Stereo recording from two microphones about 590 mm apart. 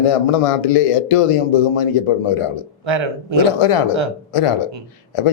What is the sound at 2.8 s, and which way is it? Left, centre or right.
Speech, right.